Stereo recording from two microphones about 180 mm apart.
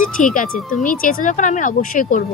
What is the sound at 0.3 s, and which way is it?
A woman's voice, 50° left (ahead or behind).